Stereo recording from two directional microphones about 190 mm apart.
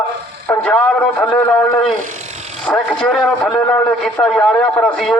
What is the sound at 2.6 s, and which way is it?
A man's voice, 5° left (ahead or behind).